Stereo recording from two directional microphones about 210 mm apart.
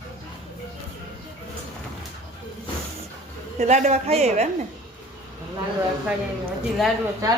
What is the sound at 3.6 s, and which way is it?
Speech, 35° right (ahead or behind).